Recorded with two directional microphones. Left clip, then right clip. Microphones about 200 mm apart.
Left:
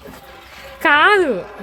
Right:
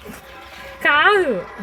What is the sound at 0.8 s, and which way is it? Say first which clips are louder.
Speech: left 2 dB; 15° left (ahead or behind).